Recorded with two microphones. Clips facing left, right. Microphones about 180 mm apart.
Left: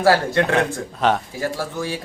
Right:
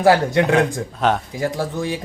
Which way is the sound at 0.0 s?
15° right (ahead or behind).